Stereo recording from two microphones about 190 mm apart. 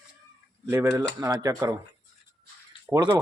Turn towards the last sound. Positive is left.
turn(degrees=-20)  # may be behind; listen again after turning